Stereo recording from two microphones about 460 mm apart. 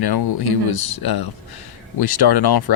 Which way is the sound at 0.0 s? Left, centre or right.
Left.